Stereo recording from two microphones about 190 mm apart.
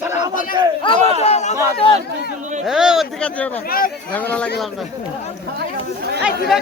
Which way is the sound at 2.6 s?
5° right (ahead or behind).